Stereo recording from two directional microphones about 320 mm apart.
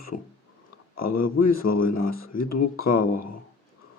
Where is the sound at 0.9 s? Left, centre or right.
Left.